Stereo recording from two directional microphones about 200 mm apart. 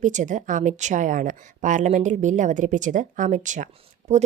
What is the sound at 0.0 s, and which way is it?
A woman's voice, 40° right (ahead or behind).